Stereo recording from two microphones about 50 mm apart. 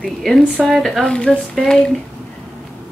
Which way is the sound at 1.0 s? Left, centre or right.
Centre.